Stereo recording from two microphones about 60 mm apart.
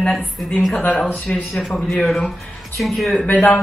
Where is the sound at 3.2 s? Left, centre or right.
Left.